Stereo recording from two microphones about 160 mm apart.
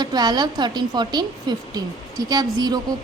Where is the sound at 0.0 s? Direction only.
25° right (ahead or behind).